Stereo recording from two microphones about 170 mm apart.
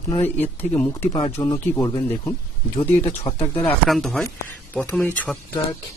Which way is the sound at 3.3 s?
30° left (ahead or behind).